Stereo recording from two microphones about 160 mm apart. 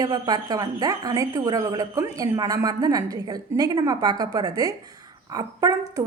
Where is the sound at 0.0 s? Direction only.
25° right (ahead or behind).